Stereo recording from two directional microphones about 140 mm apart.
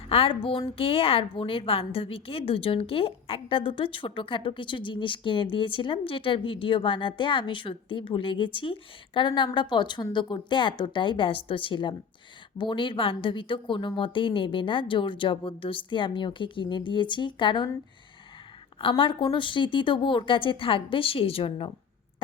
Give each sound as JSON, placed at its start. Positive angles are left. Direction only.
{"t": 0.1, "sound": "a woman's voice", "side_deg": 40}
{"t": 18.8, "sound": "a woman's voice", "side_deg": 40}